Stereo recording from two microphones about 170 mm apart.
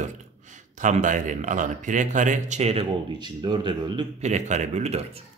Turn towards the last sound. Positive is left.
turn(degrees=-40)  # may be behind; listen again after turning